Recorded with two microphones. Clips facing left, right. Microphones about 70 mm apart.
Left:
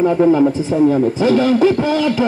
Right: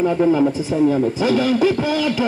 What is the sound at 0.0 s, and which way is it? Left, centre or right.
A man's voice, centre.